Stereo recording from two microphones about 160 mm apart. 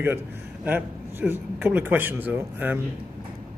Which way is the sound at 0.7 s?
10° right (ahead or behind).